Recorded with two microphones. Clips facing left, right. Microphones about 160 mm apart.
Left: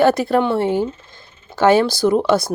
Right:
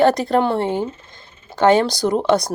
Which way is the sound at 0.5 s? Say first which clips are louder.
Left 2 dB; 25° right (ahead or behind).